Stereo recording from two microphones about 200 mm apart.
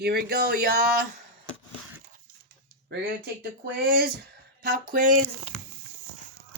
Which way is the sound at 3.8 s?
50° right (ahead or behind).